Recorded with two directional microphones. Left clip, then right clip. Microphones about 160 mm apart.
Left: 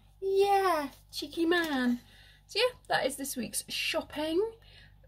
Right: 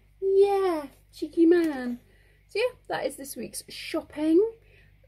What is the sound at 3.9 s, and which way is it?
Speech, 25° right (ahead or behind).